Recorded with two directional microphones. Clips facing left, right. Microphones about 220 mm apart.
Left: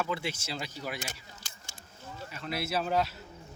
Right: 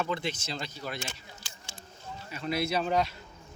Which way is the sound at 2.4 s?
5° left (ahead or behind).